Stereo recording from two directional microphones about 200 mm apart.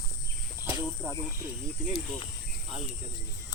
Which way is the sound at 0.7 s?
15° right (ahead or behind).